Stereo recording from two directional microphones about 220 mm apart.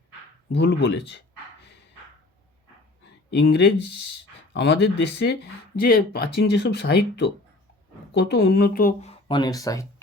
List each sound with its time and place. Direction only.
0.5 s speech: 50° left (ahead or behind)
3.2 s speech: 50° left (ahead or behind); by 9.8 s 15° left (ahead or behind)